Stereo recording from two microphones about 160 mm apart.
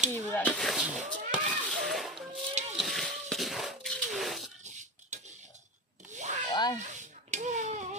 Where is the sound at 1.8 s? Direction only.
Centre (ahead or behind).